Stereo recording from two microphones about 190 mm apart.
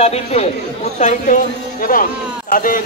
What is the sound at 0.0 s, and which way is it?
A man's voice, 35° left (ahead or behind).